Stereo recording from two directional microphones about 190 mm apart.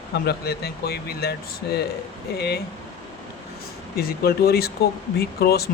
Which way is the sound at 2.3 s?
60° left (ahead or behind).